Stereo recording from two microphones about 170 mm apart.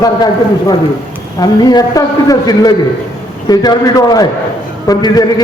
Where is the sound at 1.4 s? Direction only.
20° left (ahead or behind).